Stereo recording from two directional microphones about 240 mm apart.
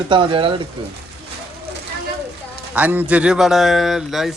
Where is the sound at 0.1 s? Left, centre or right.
Right.